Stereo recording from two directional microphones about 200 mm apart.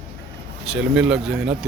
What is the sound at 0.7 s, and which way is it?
Speech, 5° right (ahead or behind).